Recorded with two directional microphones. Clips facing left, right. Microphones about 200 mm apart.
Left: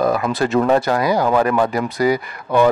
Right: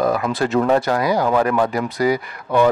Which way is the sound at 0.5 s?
20° left (ahead or behind).